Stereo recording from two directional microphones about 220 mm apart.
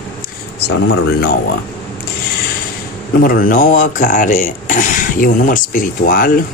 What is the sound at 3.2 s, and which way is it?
Speech, 40° left (ahead or behind).